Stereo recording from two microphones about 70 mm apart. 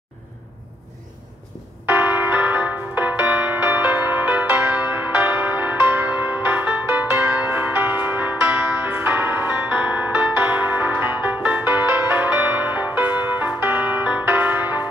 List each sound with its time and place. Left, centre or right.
1.9 s music: right
7.5 s music: right
11.7 s music: right